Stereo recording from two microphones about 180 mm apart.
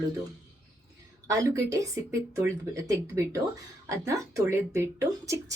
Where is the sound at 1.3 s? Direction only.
15° right (ahead or behind).